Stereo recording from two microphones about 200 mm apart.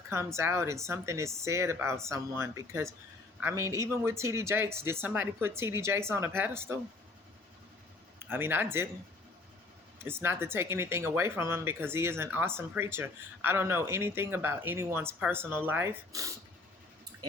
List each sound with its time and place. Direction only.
0.1 s speech: 15° right (ahead or behind)
8.3 s speech: 10° right (ahead or behind)
10.0 s speech: 10° right (ahead or behind)